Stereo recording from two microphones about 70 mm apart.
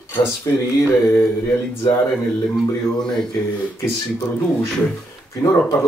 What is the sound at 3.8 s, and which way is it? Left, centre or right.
Speech, left.